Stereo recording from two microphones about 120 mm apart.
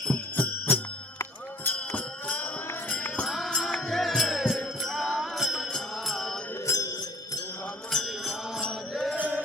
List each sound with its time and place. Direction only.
0.0 s jingle bell: 10° left (ahead or behind)
1.6 s music: 15° left (ahead or behind)
3.2 s music: centre (ahead or behind)
6.7 s music: 30° left (ahead or behind)
7.9 s mantra: centre (ahead or behind)
9.1 s mantra: 15° right (ahead or behind)